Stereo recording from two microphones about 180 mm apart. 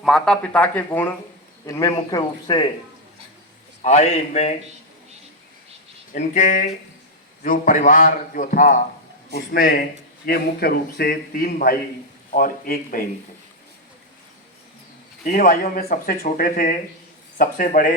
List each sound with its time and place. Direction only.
0.0 s speech: centre (ahead or behind); by 2.6 s 25° left (ahead or behind)
3.8 s a man's voice: 40° left (ahead or behind)
6.1 s a man's voice: 40° left (ahead or behind)
15.2 s speech: 50° left (ahead or behind)